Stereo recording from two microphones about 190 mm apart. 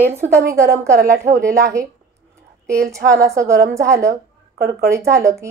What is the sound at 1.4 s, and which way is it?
Speech, 15° right (ahead or behind).